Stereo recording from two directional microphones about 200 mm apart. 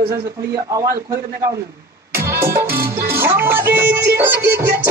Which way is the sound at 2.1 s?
10° right (ahead or behind).